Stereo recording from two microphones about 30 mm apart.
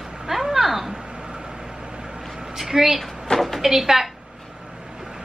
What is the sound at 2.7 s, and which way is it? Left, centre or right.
Speech, centre.